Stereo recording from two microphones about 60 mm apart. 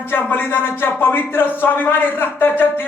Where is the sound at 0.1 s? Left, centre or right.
Left.